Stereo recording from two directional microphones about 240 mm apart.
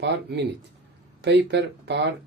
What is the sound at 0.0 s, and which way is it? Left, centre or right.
Speech, right.